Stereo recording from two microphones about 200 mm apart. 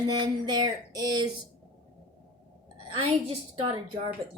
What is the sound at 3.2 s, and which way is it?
Speech, 25° right (ahead or behind).